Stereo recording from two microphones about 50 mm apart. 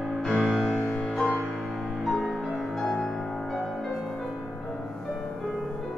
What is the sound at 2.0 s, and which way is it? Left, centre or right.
Music, centre.